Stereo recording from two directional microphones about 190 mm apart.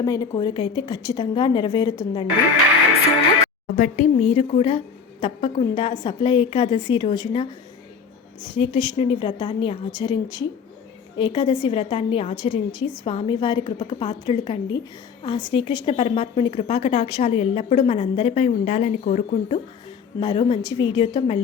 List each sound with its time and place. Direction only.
0.0 s a woman's voice: 20° left (ahead or behind)
3.8 s a woman's voice: 45° left (ahead or behind); by 7.4 s 25° left (ahead or behind)
8.5 s a woman's voice: 30° left (ahead or behind)
20.1 s a woman's voice: 25° left (ahead or behind)